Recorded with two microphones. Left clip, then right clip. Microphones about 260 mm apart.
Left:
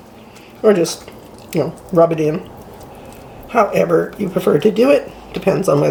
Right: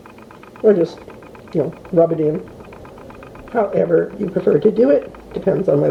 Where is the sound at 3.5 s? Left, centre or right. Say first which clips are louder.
Left 2 dB; left.